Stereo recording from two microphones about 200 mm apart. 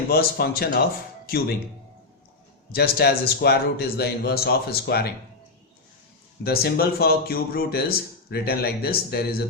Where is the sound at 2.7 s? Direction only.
50° left (ahead or behind).